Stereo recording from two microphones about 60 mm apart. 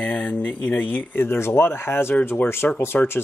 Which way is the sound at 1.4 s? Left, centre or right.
Left.